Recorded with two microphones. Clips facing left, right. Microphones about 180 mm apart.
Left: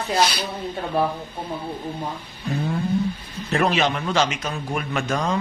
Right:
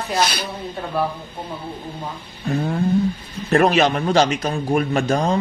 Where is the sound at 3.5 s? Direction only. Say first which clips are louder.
Right 5 dB; 45° right (ahead or behind).